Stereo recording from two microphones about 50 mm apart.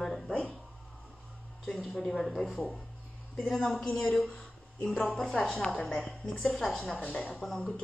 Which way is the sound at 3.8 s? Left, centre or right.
Left.